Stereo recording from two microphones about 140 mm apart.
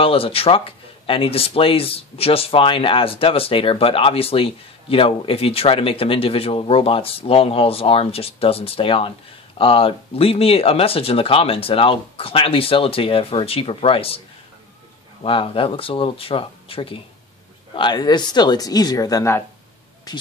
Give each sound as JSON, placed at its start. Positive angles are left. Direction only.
{"t": 0.0, "sound": "speech", "side_deg": 40}
{"t": 15.2, "sound": "speech", "side_deg": 40}